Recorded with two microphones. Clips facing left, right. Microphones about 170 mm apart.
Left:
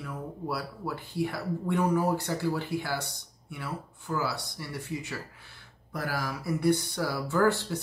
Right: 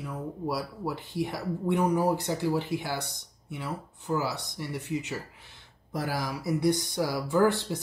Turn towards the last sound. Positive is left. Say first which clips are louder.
# right 1 dB
turn(degrees=-15)  # may be behind; listen again after turning